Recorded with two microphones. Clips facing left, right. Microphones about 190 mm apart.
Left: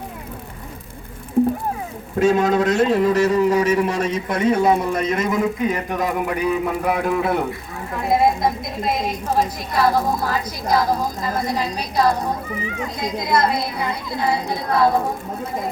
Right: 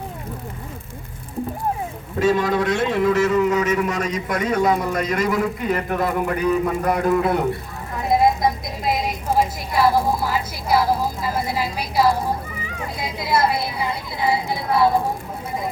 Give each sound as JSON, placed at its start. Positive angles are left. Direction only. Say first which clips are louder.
{"t": 2.1, "sound": "a man's voice", "louder": "left 2 dB", "side_deg": 50}